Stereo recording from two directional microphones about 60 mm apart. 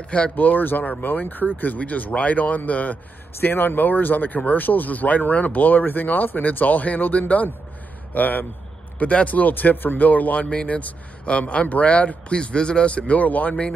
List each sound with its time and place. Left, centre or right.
0.1 s speech: left